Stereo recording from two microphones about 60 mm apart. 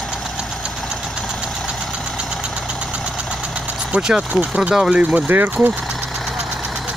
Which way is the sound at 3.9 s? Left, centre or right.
Centre.